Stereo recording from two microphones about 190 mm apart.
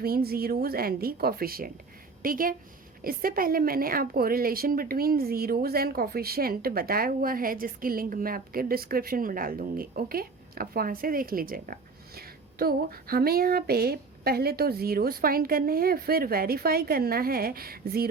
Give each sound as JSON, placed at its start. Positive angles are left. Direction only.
{"t": 0.0, "sound": "a woman's voice", "side_deg": -55}